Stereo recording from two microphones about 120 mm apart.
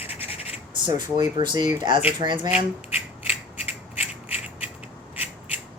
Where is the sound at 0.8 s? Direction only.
40° right (ahead or behind).